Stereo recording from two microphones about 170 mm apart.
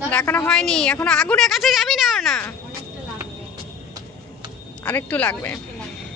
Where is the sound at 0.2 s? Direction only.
10° left (ahead or behind).